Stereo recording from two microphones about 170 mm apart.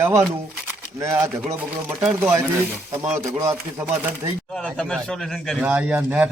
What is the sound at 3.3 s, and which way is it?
Speech, 20° right (ahead or behind).